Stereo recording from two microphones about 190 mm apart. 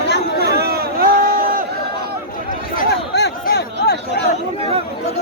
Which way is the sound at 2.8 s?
55° left (ahead or behind).